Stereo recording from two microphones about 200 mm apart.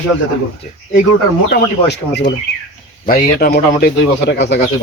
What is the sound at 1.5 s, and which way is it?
Speech, 55° left (ahead or behind).